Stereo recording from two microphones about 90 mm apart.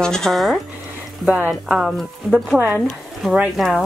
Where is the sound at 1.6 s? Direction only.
5° right (ahead or behind).